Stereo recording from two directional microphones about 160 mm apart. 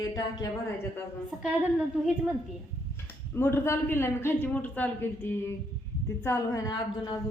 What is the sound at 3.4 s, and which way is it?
A woman's voice, 15° left (ahead or behind).